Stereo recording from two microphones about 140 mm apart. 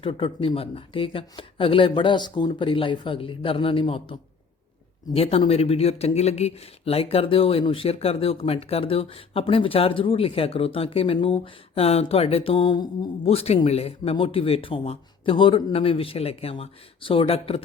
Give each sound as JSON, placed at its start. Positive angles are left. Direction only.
{"t": 0.0, "sound": "speech", "side_deg": 40}
{"t": 13.2, "sound": "speech", "side_deg": 45}